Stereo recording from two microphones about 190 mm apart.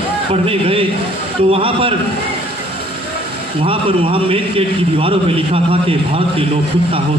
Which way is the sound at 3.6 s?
30° right (ahead or behind).